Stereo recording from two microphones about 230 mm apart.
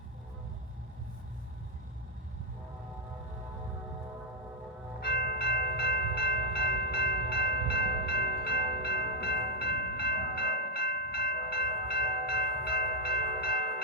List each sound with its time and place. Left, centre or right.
4.9 s bell: left